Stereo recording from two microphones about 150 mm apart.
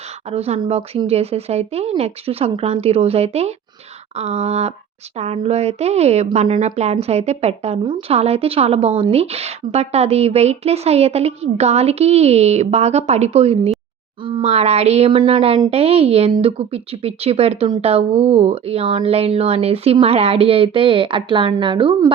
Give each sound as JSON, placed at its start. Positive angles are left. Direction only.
{"t": 0.3, "sound": "a woman's voice", "side_deg": -45}